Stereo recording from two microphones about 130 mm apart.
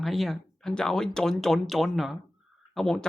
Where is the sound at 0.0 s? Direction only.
Centre (ahead or behind).